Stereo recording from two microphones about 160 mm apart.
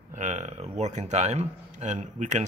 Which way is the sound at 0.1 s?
50° right (ahead or behind).